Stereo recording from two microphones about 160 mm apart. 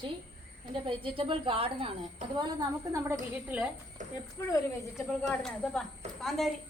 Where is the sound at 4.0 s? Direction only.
55° right (ahead or behind).